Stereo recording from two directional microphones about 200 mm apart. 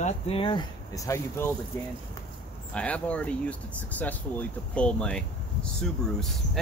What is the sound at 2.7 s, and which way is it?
Speech, 5° left (ahead or behind).